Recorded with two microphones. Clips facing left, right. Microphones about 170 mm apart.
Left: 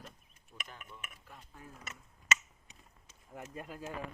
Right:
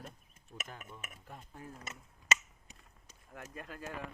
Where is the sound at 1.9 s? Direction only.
35° right (ahead or behind).